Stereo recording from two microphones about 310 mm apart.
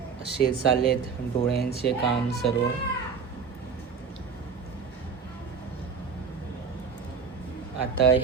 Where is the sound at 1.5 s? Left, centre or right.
Left.